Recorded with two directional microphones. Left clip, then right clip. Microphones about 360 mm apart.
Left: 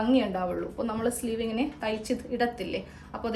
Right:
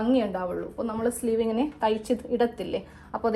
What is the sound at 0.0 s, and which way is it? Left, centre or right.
Speech, centre.